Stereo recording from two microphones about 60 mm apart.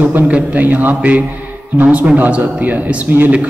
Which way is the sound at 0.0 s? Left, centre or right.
Right.